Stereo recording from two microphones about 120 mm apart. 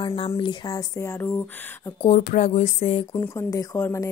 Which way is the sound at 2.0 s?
90° left.